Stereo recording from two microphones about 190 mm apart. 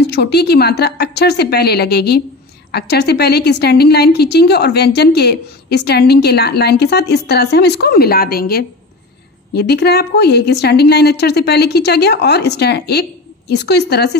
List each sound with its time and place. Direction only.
0.1 s a woman's voice: 60° left (ahead or behind)